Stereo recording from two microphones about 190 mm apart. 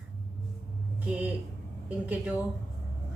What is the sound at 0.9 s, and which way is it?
A woman's voice, 10° right (ahead or behind).